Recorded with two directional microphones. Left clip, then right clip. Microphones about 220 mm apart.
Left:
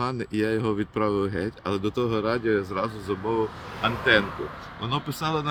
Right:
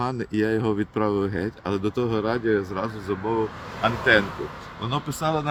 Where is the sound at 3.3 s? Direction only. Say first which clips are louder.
Even; 30° left (ahead or behind).